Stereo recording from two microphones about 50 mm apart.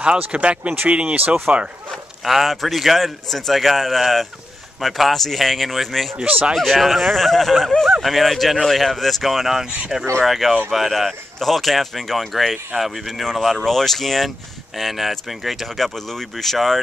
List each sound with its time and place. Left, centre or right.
0.0 s speech: right
2.2 s speech: centre
6.1 s speech: right
6.6 s speech: centre